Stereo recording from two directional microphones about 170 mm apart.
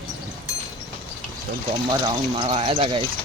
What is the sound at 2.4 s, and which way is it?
Speech, 30° right (ahead or behind).